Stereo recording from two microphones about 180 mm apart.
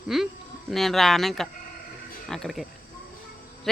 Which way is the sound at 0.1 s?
Centre (ahead or behind).